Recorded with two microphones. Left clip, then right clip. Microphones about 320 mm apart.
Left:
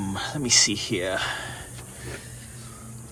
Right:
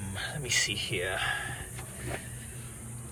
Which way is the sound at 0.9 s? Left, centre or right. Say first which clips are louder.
Left 4 dB; left.